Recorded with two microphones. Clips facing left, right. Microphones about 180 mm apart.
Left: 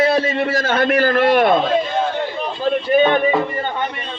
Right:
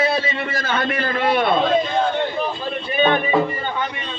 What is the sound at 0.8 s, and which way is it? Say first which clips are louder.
Speech: left 8 dB; 75° left (ahead or behind).